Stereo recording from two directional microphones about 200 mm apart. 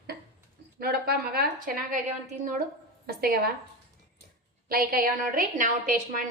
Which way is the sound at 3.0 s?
50° right (ahead or behind).